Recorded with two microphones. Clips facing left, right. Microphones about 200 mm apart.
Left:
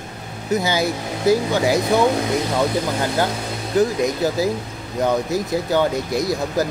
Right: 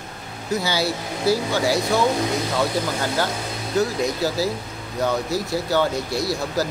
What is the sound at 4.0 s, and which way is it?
Speech, 20° left (ahead or behind).